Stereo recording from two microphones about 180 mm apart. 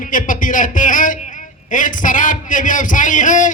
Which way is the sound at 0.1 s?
50° left (ahead or behind).